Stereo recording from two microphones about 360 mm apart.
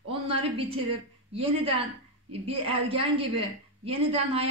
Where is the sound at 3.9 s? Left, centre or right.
Centre.